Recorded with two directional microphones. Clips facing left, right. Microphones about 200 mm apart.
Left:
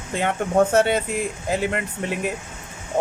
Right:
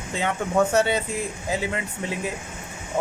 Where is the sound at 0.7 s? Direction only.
55° left (ahead or behind).